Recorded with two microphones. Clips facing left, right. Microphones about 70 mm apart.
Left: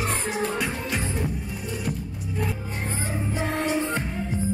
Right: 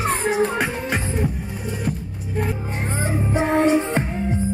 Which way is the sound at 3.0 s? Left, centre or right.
Right.